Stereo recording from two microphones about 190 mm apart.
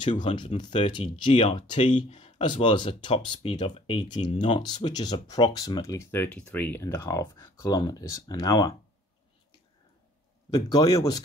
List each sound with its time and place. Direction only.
0.4 s speech: 25° left (ahead or behind)
10.5 s speech: 20° left (ahead or behind)